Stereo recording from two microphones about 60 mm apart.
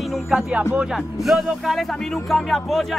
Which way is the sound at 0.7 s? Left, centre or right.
Centre.